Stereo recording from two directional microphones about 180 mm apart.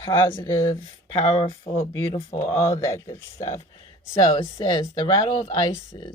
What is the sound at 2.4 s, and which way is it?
Speech, 15° left (ahead or behind).